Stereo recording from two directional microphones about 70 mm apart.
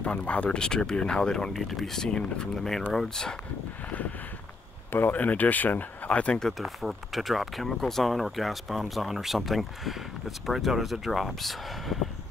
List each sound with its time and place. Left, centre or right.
0.0 s speech: centre
4.9 s speech: left
6.4 s speech: centre